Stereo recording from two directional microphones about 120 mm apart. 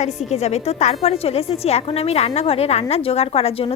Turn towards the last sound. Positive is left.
turn(degrees=55)  # may be behind; listen again after turning